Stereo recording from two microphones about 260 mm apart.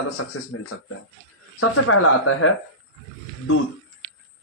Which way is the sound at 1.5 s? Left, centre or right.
Left.